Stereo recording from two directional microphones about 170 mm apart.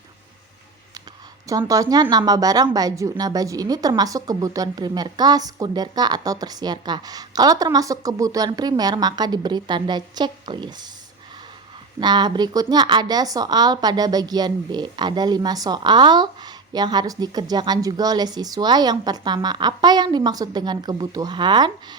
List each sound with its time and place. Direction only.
1.5 s a woman's voice: 20° right (ahead or behind)
11.9 s a woman's voice: 25° right (ahead or behind)